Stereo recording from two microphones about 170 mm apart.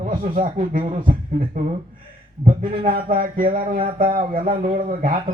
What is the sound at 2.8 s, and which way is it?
Speech, 55° right (ahead or behind).